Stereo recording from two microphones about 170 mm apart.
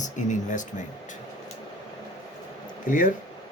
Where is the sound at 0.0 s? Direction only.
45° left (ahead or behind).